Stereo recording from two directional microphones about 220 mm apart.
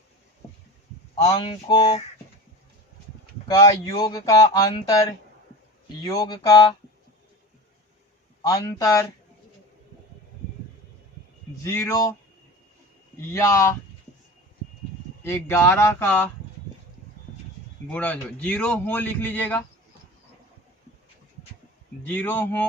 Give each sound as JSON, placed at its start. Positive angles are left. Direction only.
{"t": 1.2, "sound": "a sound", "side_deg": 20}
{"t": 3.4, "sound": "a man's voice", "side_deg": 20}
{"t": 6.0, "sound": "a sound", "side_deg": 20}
{"t": 8.4, "sound": "a man's voice", "side_deg": 15}
{"t": 11.6, "sound": "a man's voice", "side_deg": 10}
{"t": 13.3, "sound": "a man's voice", "side_deg": 15}
{"t": 15.2, "sound": "a man's voice", "side_deg": 10}
{"t": 17.9, "sound": "a man's voice", "side_deg": 5}
{"t": 22.0, "sound": "a man's voice", "side_deg": 10}